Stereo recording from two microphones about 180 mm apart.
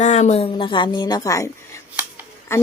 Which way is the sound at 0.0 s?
40° left (ahead or behind).